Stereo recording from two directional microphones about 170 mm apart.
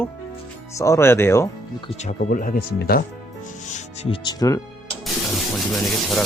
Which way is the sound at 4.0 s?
30° left (ahead or behind).